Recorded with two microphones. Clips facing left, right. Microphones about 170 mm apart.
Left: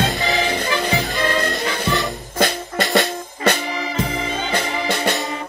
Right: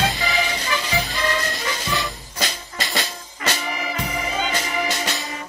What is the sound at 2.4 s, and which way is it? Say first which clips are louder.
Music: left 10 dB; 55° left (ahead or behind).